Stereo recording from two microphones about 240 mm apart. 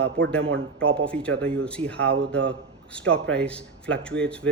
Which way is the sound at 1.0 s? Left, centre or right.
Centre.